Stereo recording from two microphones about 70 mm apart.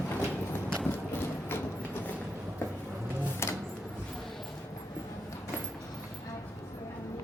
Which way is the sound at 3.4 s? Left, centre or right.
Left.